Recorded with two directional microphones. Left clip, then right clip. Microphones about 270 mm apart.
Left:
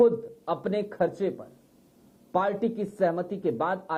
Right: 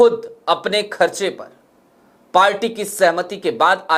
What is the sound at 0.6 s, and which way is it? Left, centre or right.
Speech, centre.